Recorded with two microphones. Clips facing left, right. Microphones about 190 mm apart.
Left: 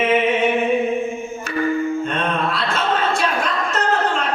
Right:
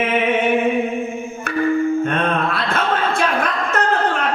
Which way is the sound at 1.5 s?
55° right (ahead or behind).